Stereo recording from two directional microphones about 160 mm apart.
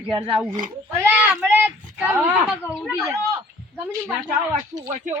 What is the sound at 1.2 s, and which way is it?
A child's voice, 10° right (ahead or behind).